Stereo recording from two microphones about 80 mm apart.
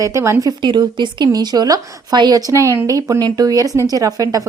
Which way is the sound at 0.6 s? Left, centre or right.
Right.